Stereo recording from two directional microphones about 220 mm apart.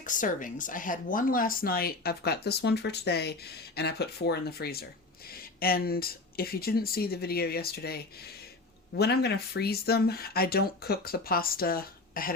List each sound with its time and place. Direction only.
0.0 s speech: 35° left (ahead or behind)